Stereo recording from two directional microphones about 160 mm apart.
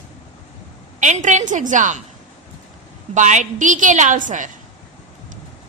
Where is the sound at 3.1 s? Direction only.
50° right (ahead or behind).